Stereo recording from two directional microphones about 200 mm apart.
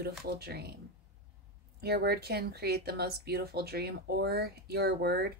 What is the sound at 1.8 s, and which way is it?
Speech, 50° right (ahead or behind).